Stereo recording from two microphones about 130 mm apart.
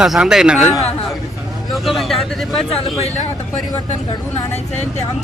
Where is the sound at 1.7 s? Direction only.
Centre (ahead or behind).